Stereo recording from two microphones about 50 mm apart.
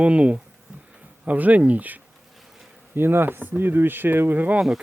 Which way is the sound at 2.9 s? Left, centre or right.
Right.